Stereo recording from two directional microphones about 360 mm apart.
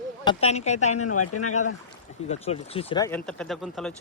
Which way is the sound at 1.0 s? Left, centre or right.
Left.